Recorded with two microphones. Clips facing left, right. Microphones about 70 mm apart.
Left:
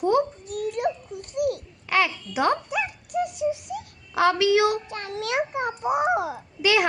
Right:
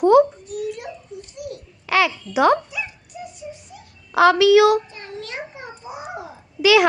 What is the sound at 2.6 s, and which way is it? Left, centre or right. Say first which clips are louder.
Dog: left 4 dB; left.